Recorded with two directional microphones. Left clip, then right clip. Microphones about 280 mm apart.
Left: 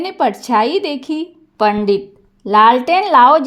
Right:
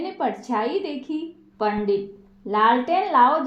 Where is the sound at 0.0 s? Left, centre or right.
Left.